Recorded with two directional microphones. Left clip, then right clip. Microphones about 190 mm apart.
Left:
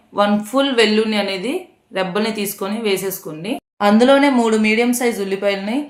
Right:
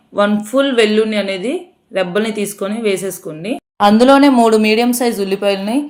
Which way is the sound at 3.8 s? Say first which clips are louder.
Right 4 dB; 45° right (ahead or behind).